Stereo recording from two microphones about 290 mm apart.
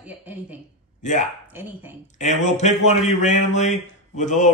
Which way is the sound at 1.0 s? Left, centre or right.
Left.